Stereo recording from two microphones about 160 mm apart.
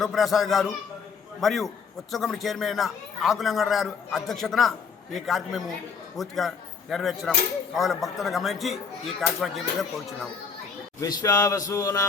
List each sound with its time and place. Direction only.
0.0 s a man's voice: centre (ahead or behind)
11.0 s a man's voice: 20° left (ahead or behind)